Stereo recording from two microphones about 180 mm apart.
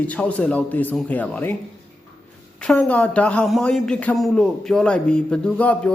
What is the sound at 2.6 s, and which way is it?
Speech, 5° left (ahead or behind).